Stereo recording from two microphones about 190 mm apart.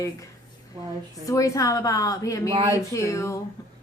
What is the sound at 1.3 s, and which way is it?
A woman's voice, 15° left (ahead or behind).